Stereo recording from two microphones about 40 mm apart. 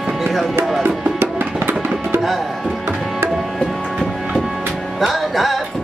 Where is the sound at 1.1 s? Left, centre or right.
Right.